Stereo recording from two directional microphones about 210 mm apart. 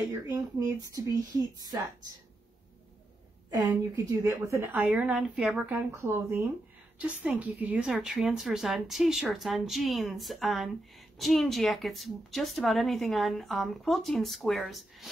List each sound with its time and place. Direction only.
0.1 s a woman's voice: 15° right (ahead or behind)
3.4 s a woman's voice: 15° right (ahead or behind); by 15.0 s centre (ahead or behind)